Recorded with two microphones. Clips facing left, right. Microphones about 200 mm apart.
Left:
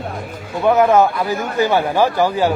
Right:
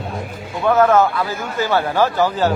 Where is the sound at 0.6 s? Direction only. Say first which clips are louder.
Left 1 dB; 15° left (ahead or behind).